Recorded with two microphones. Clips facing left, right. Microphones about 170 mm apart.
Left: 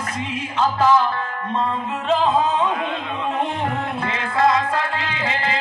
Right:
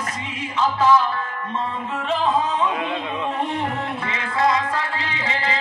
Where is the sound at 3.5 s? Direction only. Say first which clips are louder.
Left 1 dB; 50° left (ahead or behind).